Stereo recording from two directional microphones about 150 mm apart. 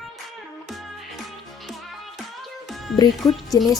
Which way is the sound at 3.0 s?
30° left (ahead or behind).